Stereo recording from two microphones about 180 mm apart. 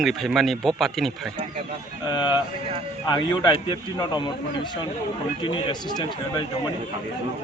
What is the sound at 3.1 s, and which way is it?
A man's voice, 25° left (ahead or behind).